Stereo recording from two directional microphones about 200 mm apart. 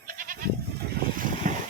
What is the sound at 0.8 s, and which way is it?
Boat, 50° right (ahead or behind).